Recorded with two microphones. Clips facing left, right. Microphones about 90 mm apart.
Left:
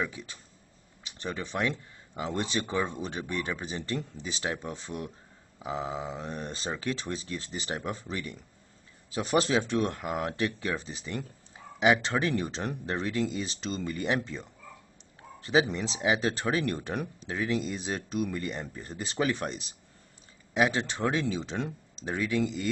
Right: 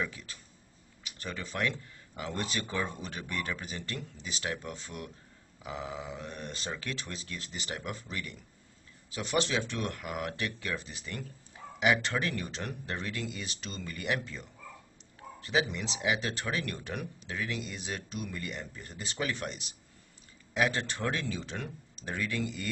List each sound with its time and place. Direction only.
0.0 s speech: 20° left (ahead or behind)
20.5 s speech: 20° left (ahead or behind)